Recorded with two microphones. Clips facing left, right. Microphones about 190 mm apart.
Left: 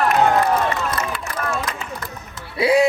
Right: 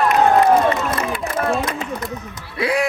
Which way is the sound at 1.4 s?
35° right (ahead or behind).